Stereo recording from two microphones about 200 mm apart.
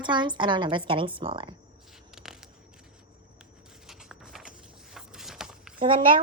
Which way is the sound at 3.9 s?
Centre (ahead or behind).